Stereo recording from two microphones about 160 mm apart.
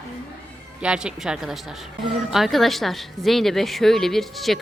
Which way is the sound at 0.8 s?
5° right (ahead or behind).